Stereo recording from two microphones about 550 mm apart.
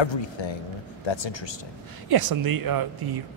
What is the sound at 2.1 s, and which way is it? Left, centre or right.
Speech, right.